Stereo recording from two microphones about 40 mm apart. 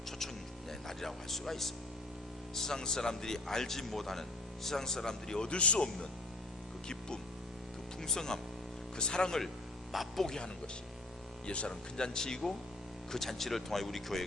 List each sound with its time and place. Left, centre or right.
0.9 s speech: centre; by 6.1 s left
8.0 s speech: centre
9.9 s a man's voice: centre
10.2 s speech: centre
11.4 s speech: left; by 14.3 s centre